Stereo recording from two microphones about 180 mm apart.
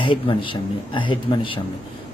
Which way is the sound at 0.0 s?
25° left (ahead or behind).